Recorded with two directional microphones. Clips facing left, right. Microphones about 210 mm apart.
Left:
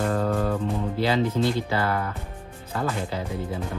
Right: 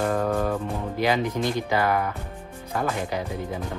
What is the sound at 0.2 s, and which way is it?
Music, 15° right (ahead or behind).